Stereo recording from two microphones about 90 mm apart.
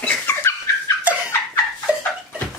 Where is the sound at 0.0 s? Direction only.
15° left (ahead or behind).